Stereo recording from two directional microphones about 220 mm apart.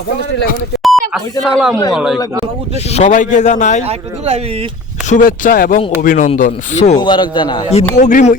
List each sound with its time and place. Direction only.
0.8 s beep: centre (ahead or behind)
1.9 s speech: centre (ahead or behind)
2.9 s a man's voice: 30° left (ahead or behind)
5.0 s a man's voice: 35° left (ahead or behind)
7.9 s a man's voice: 35° left (ahead or behind)